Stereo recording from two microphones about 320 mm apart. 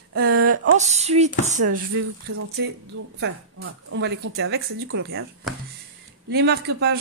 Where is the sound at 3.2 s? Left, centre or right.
Right.